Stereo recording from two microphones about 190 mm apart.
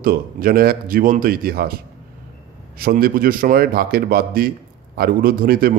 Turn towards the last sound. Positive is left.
turn(degrees=-50)  # may be behind; listen again after turning